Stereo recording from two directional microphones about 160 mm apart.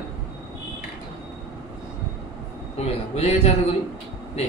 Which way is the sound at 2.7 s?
40° left (ahead or behind).